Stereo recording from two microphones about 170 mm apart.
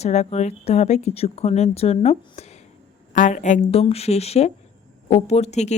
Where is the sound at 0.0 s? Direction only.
40° left (ahead or behind).